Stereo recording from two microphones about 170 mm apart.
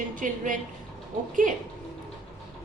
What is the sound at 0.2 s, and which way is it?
Speech, 50° right (ahead or behind).